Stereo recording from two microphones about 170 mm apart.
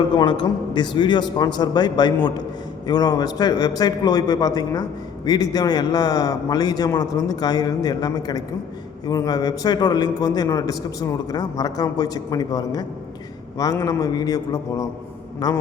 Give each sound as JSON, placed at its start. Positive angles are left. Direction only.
{"t": 0.2, "sound": "a man's voice", "side_deg": 25}